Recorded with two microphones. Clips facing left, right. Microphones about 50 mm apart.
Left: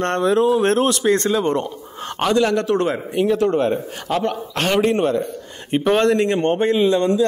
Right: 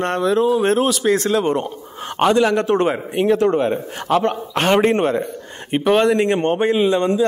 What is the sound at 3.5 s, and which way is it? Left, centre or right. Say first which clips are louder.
Speech: even; centre.